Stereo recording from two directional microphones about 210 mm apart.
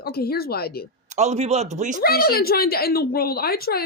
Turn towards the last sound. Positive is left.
turn(degrees=45)  # may be behind; listen again after turning